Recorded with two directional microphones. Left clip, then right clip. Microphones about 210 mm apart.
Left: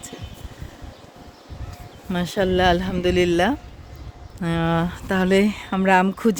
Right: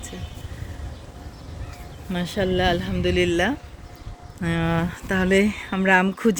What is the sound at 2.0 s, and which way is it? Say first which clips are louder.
Speech: left 3 dB; 35° left (ahead or behind).